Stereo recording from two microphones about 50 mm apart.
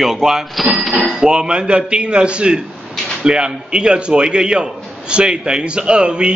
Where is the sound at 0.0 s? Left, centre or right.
Centre.